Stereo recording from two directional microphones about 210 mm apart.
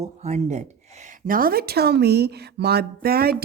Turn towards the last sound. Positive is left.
turn(degrees=-45)  # may be behind; listen again after turning